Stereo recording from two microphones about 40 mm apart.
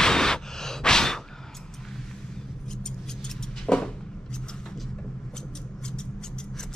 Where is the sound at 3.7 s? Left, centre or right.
Left.